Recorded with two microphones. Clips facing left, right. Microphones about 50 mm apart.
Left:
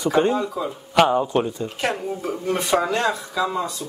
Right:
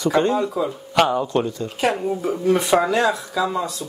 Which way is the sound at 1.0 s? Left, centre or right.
Centre.